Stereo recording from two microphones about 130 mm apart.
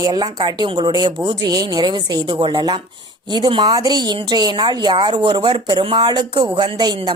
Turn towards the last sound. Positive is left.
turn(degrees=-35)  # may be behind; listen again after turning